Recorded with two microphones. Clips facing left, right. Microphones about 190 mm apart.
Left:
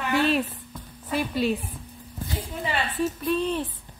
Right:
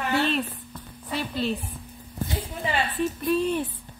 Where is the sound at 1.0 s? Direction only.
10° left (ahead or behind).